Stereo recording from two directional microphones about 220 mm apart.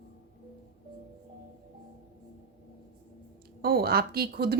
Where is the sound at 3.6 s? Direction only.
45° right (ahead or behind).